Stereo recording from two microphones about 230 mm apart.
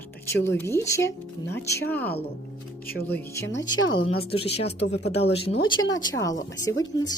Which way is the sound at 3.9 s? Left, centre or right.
Left.